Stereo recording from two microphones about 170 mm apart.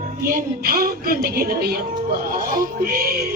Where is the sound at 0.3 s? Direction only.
60° right (ahead or behind).